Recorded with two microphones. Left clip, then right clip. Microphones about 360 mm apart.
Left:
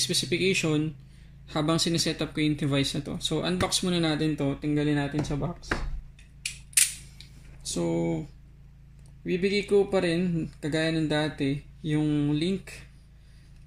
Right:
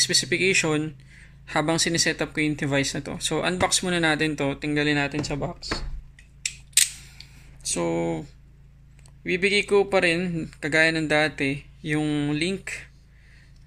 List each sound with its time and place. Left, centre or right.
0.0 s speech: centre
7.6 s speech: right
9.2 s speech: right